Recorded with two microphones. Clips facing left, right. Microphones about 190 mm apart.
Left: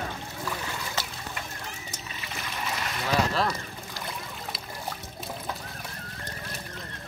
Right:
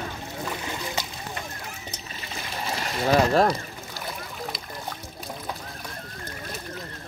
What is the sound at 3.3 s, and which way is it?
Speech, 45° right (ahead or behind).